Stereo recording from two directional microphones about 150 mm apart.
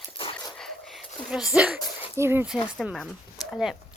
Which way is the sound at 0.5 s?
Centre (ahead or behind).